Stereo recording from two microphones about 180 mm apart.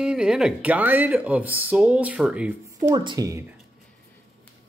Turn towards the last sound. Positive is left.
turn(degrees=-20)  # may be behind; listen again after turning